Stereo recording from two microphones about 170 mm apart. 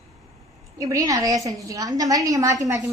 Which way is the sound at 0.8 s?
20° right (ahead or behind).